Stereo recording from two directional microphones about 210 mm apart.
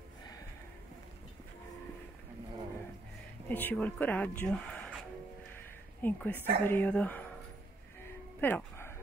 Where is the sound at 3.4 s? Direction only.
10° left (ahead or behind).